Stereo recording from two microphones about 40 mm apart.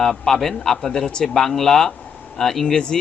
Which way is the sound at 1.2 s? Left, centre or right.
Centre.